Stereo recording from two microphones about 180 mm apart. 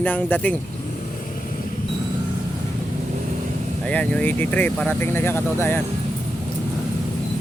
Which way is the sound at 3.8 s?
5° left (ahead or behind).